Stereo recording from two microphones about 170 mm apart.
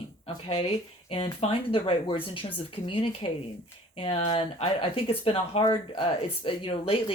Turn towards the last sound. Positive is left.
turn(degrees=35)  # may be behind; listen again after turning